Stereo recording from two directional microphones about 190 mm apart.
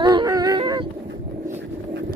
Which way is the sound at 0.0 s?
20° right (ahead or behind).